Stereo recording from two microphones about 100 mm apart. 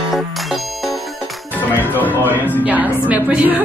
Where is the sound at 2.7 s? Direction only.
15° right (ahead or behind).